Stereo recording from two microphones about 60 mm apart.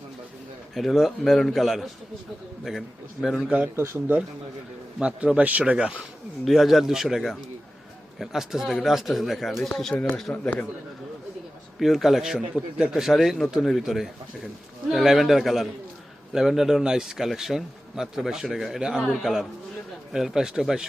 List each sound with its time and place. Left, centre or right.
0.7 s a man's voice: centre
3.8 s speech: right
4.9 s a man's voice: centre
6.4 s a man's voice: centre
9.9 s speech: left
11.8 s a man's voice: centre
12.5 s a man's voice: centre